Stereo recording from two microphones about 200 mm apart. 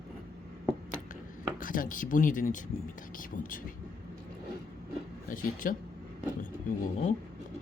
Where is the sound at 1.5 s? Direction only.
45° left (ahead or behind).